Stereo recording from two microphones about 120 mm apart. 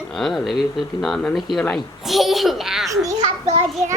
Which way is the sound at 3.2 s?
70° right (ahead or behind).